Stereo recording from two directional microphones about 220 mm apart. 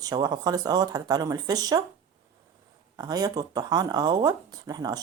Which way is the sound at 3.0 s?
20° right (ahead or behind).